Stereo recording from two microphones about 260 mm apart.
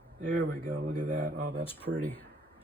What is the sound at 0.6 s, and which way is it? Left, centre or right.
Speech, right.